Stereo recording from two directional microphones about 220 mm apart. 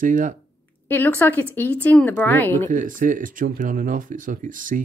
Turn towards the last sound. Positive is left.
turn(degrees=-35)  # may be behind; listen again after turning